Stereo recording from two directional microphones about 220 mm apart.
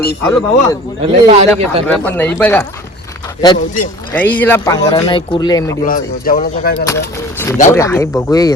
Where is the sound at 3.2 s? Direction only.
20° left (ahead or behind).